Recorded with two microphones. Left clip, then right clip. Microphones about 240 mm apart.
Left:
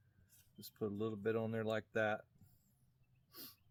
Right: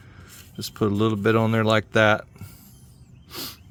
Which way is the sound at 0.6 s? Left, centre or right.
Right.